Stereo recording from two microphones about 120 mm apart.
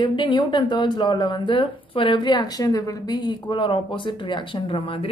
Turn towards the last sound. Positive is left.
turn(degrees=45)  # may be behind; listen again after turning